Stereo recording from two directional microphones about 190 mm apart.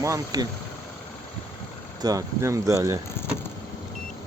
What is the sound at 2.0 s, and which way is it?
Speech, 20° right (ahead or behind).